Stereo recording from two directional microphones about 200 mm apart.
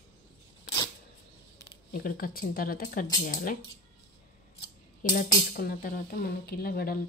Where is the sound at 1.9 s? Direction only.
45° left (ahead or behind).